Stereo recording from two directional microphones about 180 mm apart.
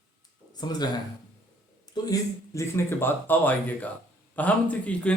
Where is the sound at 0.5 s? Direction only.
20° left (ahead or behind).